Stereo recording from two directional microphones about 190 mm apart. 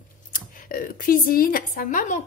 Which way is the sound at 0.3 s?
45° left (ahead or behind).